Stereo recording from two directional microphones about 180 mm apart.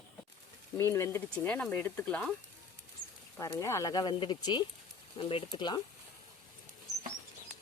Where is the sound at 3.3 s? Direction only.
15° left (ahead or behind).